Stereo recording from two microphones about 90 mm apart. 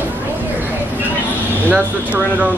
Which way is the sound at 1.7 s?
15° right (ahead or behind).